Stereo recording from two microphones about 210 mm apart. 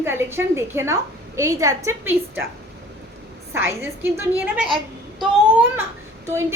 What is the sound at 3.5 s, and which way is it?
A woman's voice, 10° right (ahead or behind).